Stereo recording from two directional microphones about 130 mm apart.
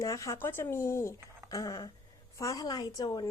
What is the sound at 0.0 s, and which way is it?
A woman's voice, 25° left (ahead or behind).